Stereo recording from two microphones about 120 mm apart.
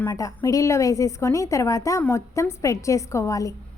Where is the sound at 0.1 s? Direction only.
30° left (ahead or behind).